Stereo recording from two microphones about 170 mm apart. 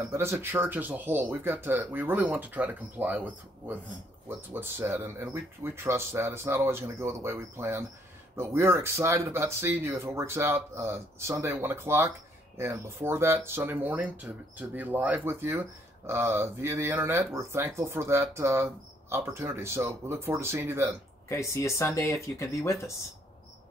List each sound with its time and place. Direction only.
0.1 s speech: 15° right (ahead or behind)
21.3 s speech: 15° left (ahead or behind)